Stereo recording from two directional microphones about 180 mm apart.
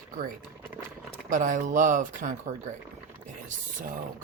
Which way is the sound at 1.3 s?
45° right (ahead or behind).